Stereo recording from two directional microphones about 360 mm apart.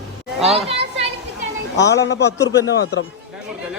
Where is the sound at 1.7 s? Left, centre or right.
Left.